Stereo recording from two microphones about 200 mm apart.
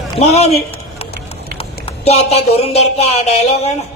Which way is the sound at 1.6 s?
30° left (ahead or behind).